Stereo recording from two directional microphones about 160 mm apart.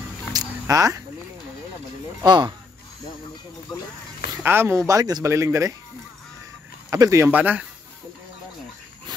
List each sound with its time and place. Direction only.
0.3 s music: 20° right (ahead or behind)
2.2 s speech: 25° right (ahead or behind)
4.4 s speech: 15° right (ahead or behind)
6.9 s speech: 20° right (ahead or behind)